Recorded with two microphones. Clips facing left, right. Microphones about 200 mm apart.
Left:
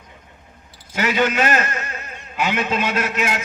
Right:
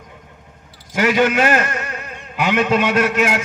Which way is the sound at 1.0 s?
50° right (ahead or behind).